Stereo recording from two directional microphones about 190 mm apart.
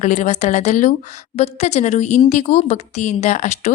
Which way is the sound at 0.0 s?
40° left (ahead or behind).